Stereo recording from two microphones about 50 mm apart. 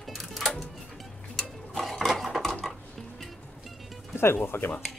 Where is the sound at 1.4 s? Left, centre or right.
Centre.